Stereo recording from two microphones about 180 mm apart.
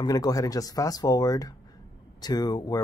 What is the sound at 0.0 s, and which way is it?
A man's voice, 20° left (ahead or behind).